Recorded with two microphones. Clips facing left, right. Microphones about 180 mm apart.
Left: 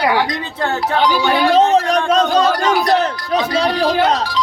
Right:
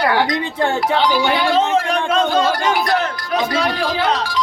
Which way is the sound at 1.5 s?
40° left (ahead or behind).